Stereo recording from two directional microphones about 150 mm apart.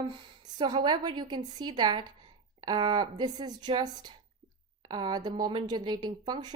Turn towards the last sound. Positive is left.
turn(degrees=-30)  # may be behind; listen again after turning